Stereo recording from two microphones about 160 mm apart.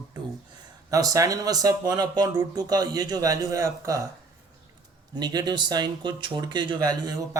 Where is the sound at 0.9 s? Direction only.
20° right (ahead or behind).